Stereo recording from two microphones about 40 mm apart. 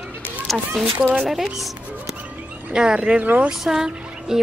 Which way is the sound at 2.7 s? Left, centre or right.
Right.